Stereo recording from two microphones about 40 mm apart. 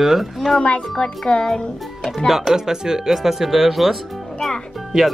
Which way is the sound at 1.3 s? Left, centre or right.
Centre.